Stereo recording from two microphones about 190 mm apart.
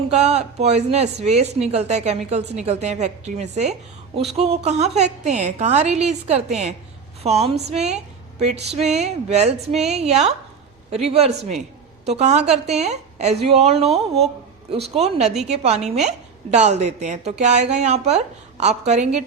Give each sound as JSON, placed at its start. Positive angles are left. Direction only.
{"t": 0.1, "sound": "a woman's voice", "side_deg": -35}